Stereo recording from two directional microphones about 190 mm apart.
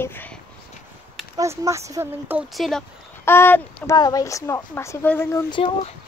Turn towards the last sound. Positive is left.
turn(degrees=25)  # may be behind; listen again after turning